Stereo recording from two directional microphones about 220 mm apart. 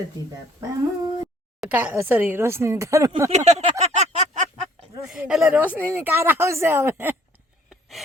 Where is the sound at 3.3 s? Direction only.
30° right (ahead or behind).